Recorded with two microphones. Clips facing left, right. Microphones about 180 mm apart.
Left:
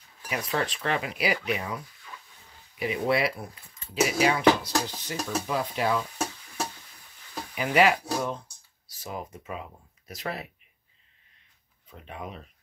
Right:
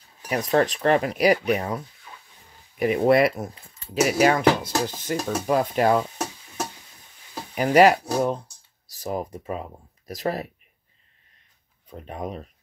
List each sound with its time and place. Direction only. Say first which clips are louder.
0.3 s speech: right 8 dB; 40° right (ahead or behind)
2.8 s speech: right 8 dB; 50° right (ahead or behind)
7.5 s speech: right 6 dB; 40° right (ahead or behind)
11.9 s speech: right 7 dB; 40° right (ahead or behind)